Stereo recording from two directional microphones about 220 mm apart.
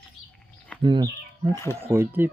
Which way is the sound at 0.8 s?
20° right (ahead or behind).